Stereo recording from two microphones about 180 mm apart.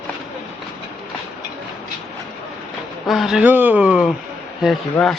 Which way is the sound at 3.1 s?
Centre (ahead or behind).